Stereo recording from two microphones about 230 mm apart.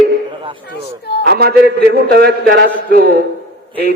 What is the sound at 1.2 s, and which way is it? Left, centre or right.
A man's voice, right.